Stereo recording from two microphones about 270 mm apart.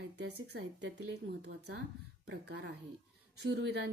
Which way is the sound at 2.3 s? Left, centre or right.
Right.